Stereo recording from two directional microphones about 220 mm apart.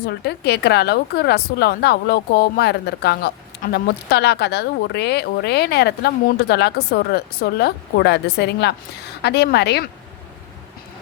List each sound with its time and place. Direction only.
0.0 s speech: 45° left (ahead or behind)